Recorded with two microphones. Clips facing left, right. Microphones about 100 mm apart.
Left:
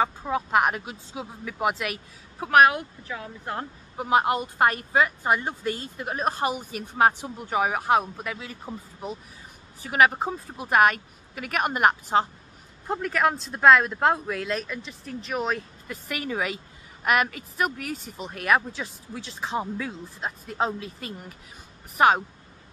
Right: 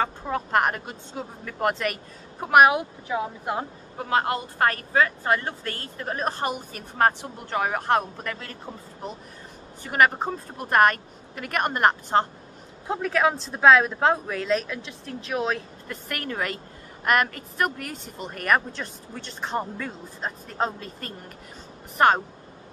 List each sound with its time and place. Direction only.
0.0 s speech: 5° left (ahead or behind)
2.4 s speech: 10° right (ahead or behind)
4.0 s speech: 15° left (ahead or behind)